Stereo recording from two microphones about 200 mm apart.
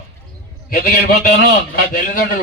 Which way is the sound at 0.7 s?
45° left (ahead or behind).